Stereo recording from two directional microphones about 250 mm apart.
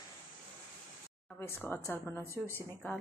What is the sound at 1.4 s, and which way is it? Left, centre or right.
A woman's voice, centre.